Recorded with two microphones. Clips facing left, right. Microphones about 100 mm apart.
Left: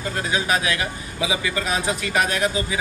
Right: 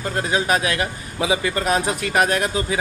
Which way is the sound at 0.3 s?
40° right (ahead or behind).